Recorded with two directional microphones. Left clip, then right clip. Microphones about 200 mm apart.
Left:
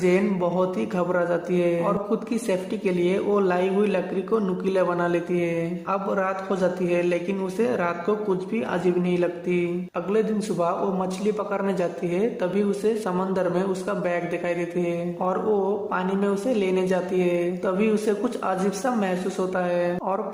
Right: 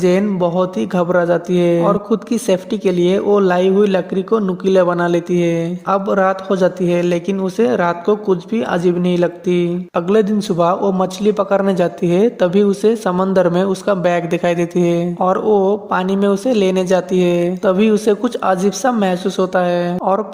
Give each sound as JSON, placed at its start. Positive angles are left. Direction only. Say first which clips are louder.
{"t": 0.0, "sound": "speech", "louder": "right 7 dB", "side_deg": -35}